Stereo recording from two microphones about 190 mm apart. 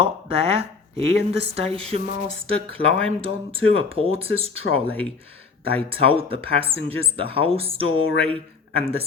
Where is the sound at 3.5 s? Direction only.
30° right (ahead or behind).